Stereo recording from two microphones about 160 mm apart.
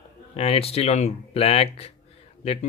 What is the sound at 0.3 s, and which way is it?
Speech, 40° left (ahead or behind).